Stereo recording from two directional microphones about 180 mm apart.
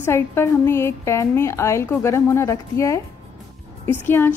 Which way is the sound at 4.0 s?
10° left (ahead or behind).